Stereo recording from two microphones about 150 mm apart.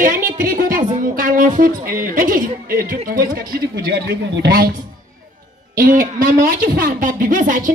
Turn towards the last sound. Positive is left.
turn(degrees=-60)  # may be behind; listen again after turning